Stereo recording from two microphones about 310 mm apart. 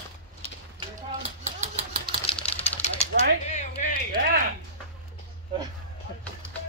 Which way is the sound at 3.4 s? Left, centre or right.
Left.